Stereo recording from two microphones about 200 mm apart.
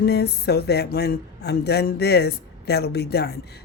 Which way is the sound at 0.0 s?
55° left (ahead or behind).